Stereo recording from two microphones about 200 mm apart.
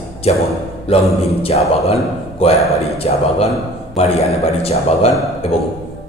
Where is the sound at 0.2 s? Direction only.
30° left (ahead or behind).